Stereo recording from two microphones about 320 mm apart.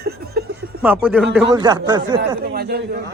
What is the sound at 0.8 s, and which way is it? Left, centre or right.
A man's voice, centre.